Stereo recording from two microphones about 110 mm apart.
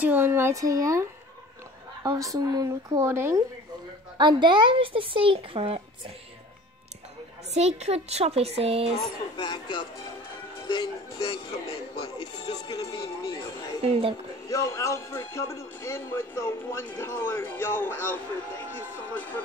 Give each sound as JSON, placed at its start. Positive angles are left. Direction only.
{"t": 0.0, "sound": "speech", "side_deg": -20}
{"t": 2.0, "sound": "speech", "side_deg": -30}
{"t": 4.2, "sound": "speech", "side_deg": -45}
{"t": 7.5, "sound": "speech", "side_deg": -80}
{"t": 9.4, "sound": "speech", "side_deg": 45}
{"t": 11.2, "sound": "speech", "side_deg": 65}
{"t": 12.7, "sound": "speech", "side_deg": 30}
{"t": 13.8, "sound": "speech", "side_deg": -75}
{"t": 14.5, "sound": "speech", "side_deg": 30}